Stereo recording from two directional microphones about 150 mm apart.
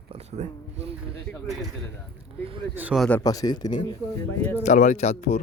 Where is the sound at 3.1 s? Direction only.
25° left (ahead or behind).